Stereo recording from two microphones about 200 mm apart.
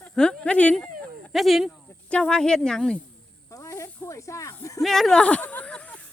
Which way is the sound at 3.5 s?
15° left (ahead or behind).